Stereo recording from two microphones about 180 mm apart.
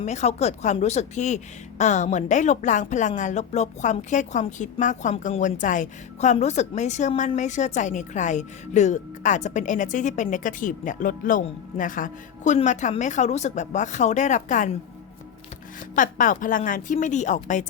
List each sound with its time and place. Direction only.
0.0 s speech: 40° left (ahead or behind)
16.0 s speech: 45° left (ahead or behind)